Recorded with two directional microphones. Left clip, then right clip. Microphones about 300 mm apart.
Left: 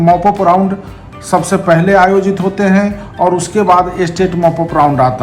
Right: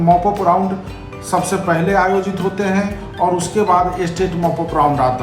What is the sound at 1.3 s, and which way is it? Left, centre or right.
Speech, left.